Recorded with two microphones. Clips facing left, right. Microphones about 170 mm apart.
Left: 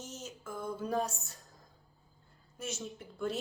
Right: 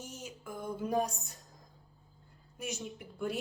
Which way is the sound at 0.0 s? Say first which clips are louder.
Even; 10° right (ahead or behind).